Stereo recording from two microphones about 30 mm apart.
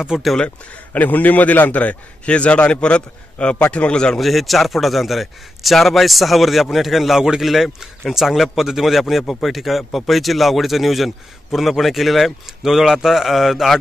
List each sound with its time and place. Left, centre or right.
0.1 s speech: centre
0.9 s a man's voice: left
3.9 s speech: left
4.2 s a man's voice: centre
7.2 s speech: right
7.4 s a man's voice: centre
12.6 s speech: centre